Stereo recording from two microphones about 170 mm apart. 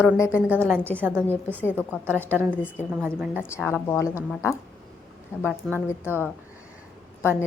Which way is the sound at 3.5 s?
15° left (ahead or behind).